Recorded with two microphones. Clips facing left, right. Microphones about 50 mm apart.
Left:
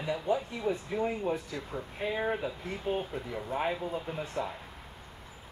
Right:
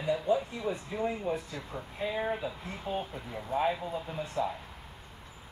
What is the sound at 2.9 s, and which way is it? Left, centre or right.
Speech, left.